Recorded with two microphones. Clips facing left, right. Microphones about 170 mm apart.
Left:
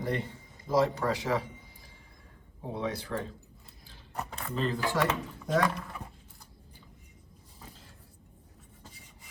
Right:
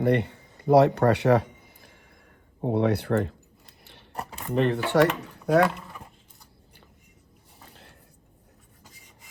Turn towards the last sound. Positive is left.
turn(degrees=-65)  # may be behind; listen again after turning